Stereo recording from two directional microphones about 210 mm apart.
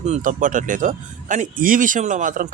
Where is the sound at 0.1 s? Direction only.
35° right (ahead or behind).